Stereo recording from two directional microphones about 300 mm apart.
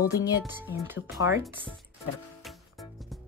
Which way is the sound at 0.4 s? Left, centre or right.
Centre.